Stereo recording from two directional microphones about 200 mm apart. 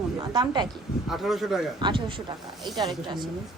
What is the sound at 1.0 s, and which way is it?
Speech, centre (ahead or behind).